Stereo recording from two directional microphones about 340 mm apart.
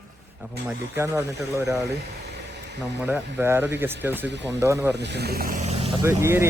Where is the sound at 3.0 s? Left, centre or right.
Centre.